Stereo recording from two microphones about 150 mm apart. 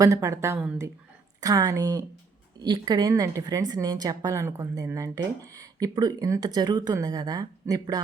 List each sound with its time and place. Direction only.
0.0 s speech: 20° right (ahead or behind)